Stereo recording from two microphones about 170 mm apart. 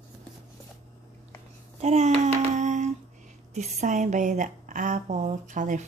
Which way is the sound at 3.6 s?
45° right (ahead or behind).